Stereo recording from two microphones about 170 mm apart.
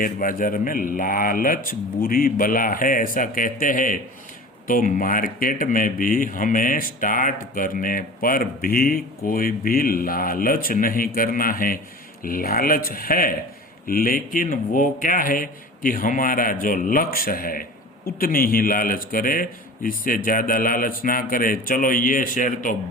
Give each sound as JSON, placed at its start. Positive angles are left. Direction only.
{"t": 0.0, "sound": "speech", "side_deg": 55}